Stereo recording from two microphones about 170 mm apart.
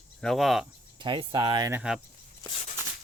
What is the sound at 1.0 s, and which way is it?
Speech, 30° right (ahead or behind).